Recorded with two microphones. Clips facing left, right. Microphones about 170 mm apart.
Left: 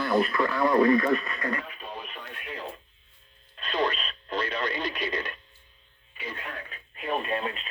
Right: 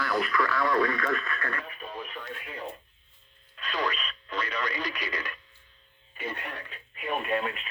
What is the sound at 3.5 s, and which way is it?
Radio, 25° left (ahead or behind).